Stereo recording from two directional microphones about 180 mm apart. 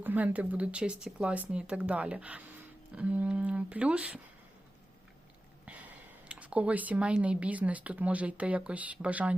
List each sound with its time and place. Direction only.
0.0 s speech: 10° right (ahead or behind)
5.6 s speech: 10° right (ahead or behind)